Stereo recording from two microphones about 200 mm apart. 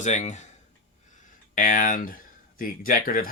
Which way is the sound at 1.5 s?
40° left (ahead or behind).